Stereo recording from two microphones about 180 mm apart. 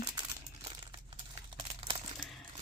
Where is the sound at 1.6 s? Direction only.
30° right (ahead or behind).